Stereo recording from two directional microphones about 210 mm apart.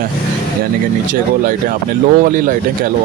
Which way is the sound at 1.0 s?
40° right (ahead or behind).